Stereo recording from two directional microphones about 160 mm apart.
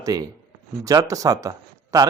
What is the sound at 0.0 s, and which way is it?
A man's voice, 25° right (ahead or behind).